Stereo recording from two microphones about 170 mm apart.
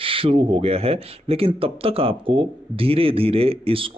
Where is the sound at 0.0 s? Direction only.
30° right (ahead or behind).